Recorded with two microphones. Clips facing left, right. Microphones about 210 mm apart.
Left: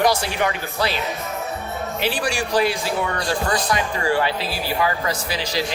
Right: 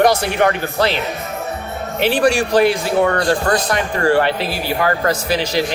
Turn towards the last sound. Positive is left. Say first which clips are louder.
# right 7 dB
turn(degrees=-60)  # may be behind; listen again after turning